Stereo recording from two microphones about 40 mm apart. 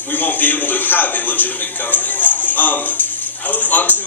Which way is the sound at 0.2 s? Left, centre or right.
Left.